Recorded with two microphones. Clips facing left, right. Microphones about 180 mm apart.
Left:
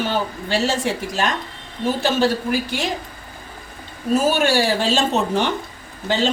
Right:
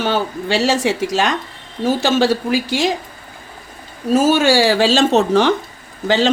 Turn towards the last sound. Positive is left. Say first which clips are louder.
# right 5 dB
turn(degrees=-90)